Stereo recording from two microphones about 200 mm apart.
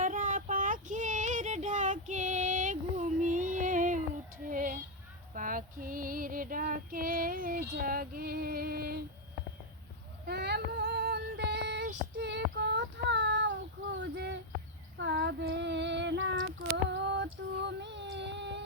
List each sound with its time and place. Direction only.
0.0 s child singing: 40° right (ahead or behind)
4.4 s a sound: 40° right (ahead or behind)
5.3 s child singing: 40° right (ahead or behind)
10.2 s female singing: 55° right (ahead or behind)
14.9 s child singing: 70° right (ahead or behind)